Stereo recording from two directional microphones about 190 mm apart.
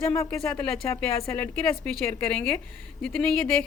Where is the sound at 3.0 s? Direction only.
5° left (ahead or behind).